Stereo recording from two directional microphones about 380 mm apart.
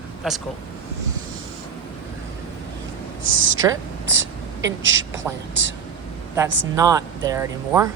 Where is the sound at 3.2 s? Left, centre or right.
Right.